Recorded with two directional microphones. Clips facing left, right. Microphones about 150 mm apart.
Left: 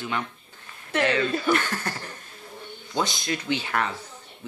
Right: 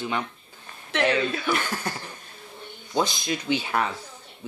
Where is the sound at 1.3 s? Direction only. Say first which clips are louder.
Left 3 dB; 10° right (ahead or behind).